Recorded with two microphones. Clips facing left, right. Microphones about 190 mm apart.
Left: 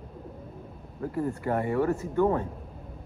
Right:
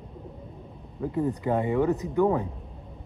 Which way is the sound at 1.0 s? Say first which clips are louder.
Right 3 dB; 15° right (ahead or behind).